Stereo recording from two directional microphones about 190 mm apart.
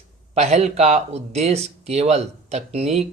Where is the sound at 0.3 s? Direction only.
35° right (ahead or behind).